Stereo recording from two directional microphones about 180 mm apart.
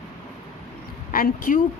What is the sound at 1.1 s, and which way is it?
Speech, 50° left (ahead or behind).